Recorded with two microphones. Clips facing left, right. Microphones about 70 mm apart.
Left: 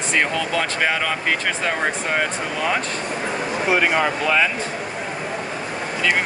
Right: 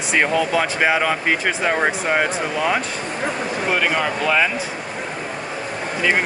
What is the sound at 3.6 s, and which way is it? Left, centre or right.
Speech, centre.